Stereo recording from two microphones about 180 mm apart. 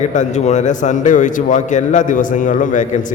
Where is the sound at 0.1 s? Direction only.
45° left (ahead or behind).